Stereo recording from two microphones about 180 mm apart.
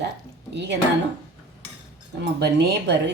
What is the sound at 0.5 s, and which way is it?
Speech, 70° right (ahead or behind).